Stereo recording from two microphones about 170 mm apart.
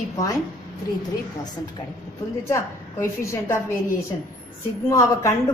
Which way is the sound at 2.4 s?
15° left (ahead or behind).